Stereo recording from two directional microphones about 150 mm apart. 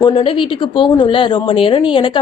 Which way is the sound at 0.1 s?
40° left (ahead or behind).